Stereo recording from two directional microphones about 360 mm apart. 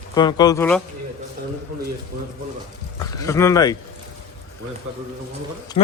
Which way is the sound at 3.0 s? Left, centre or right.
Centre.